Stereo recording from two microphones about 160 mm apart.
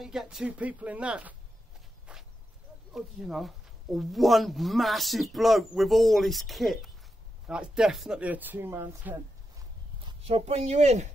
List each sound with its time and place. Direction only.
0.0 s speech: 5° right (ahead or behind)
2.9 s a man's voice: centre (ahead or behind)
10.0 s speech: 40° right (ahead or behind)